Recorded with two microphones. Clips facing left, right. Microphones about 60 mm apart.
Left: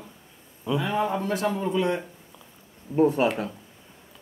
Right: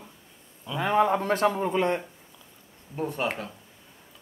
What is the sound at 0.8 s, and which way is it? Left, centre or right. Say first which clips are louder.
Speech: right 4 dB; right.